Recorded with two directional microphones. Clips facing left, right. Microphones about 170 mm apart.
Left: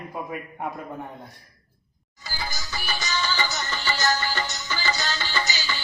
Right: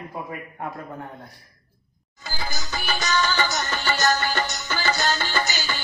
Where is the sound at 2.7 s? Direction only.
55° right (ahead or behind).